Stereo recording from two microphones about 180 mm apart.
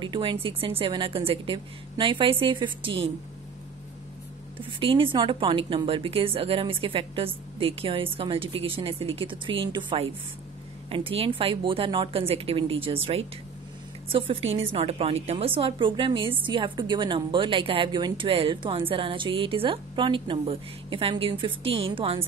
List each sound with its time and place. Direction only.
0.0 s a woman's voice: 25° right (ahead or behind)
4.6 s a woman's voice: 30° right (ahead or behind)